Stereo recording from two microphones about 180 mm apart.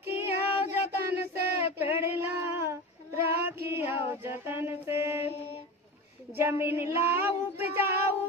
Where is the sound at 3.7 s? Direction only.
15° right (ahead or behind).